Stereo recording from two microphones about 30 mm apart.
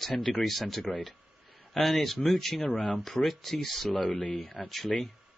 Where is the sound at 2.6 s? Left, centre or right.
Left.